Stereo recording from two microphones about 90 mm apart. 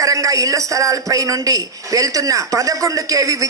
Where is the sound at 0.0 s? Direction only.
40° right (ahead or behind).